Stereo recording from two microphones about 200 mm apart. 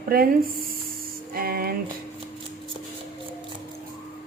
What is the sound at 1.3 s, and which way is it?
Music, 50° right (ahead or behind).